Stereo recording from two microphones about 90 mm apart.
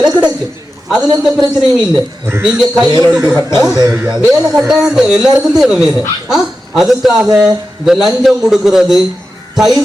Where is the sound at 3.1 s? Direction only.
10° right (ahead or behind).